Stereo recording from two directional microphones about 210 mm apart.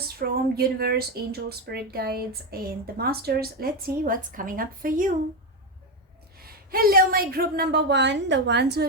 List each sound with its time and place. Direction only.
0.2 s speech: 45° right (ahead or behind)
6.4 s speech: 45° right (ahead or behind)